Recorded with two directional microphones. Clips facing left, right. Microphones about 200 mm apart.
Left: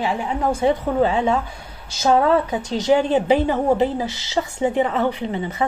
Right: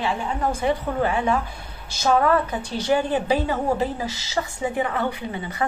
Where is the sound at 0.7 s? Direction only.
25° left (ahead or behind).